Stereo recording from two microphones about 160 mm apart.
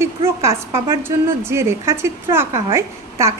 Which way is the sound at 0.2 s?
35° right (ahead or behind).